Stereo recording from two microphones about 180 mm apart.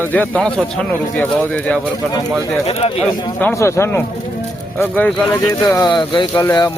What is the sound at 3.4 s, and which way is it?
Speech, 15° left (ahead or behind).